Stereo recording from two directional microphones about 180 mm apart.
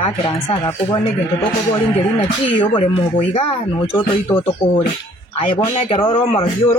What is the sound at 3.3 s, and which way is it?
Speech, 30° left (ahead or behind).